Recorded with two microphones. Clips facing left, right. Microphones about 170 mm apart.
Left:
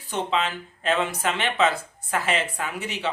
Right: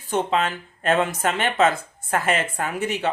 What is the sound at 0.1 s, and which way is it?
Speech, 50° right (ahead or behind).